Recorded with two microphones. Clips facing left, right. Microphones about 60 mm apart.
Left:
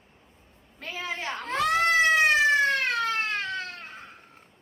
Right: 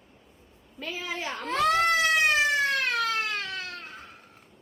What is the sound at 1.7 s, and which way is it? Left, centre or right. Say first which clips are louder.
Cat: left 3 dB; left.